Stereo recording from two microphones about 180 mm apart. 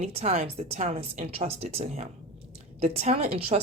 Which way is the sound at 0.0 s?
35° right (ahead or behind).